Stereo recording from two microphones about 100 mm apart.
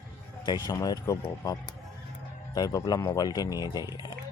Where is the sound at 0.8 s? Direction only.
35° left (ahead or behind).